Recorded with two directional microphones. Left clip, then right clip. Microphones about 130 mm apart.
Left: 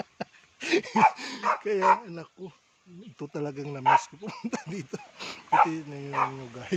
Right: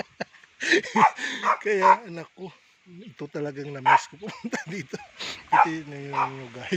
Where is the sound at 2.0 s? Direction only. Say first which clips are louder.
Right 3 dB; 10° right (ahead or behind).